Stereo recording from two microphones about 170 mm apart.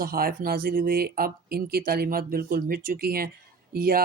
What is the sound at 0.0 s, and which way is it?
Speech, 60° right (ahead or behind).